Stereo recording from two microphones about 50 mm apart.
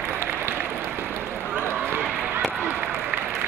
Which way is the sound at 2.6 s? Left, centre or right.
Right.